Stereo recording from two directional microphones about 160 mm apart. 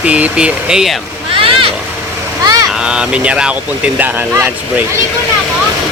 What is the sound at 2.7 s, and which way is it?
Speech, 5° right (ahead or behind).